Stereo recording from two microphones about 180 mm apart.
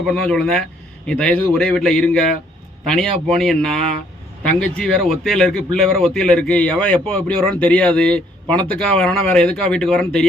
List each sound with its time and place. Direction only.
0.0 s speech: 5° left (ahead or behind)